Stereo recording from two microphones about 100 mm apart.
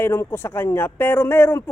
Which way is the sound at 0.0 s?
25° left (ahead or behind).